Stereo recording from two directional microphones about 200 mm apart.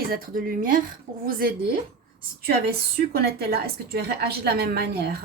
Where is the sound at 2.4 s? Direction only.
50° right (ahead or behind).